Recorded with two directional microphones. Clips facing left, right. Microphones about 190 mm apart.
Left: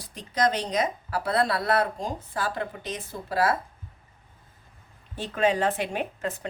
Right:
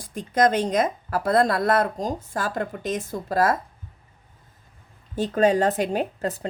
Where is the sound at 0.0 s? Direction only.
50° right (ahead or behind).